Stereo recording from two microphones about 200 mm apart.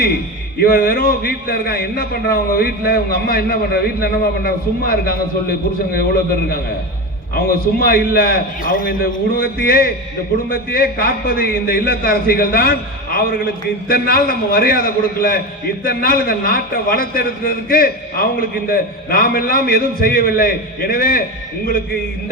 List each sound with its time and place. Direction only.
0.6 s a man's voice: 45° left (ahead or behind)
7.3 s a man's voice: 50° left (ahead or behind)